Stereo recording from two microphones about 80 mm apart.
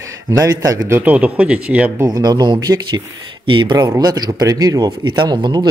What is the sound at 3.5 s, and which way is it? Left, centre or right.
Speech, right.